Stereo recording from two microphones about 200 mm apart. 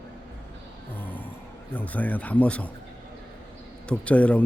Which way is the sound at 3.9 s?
5° left (ahead or behind).